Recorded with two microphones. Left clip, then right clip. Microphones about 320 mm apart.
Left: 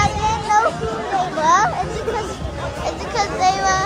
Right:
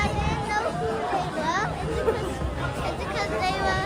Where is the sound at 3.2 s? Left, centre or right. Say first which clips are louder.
Left 10 dB; centre.